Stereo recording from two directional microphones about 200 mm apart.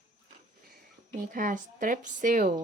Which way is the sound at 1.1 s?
45° right (ahead or behind).